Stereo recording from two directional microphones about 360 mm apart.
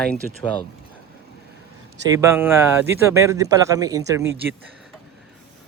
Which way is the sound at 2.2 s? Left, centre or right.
Centre.